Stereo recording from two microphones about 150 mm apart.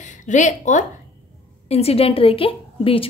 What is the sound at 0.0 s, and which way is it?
Speech, 55° left (ahead or behind).